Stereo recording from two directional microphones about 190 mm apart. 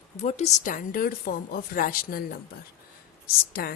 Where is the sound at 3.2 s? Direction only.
50° left (ahead or behind).